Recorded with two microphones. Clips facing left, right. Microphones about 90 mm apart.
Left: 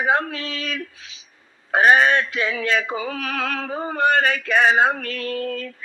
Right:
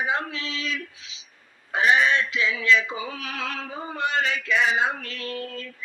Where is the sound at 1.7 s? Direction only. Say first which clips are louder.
Left 5 dB; 55° left (ahead or behind).